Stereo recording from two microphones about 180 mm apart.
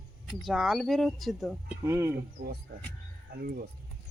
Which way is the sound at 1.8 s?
15° right (ahead or behind).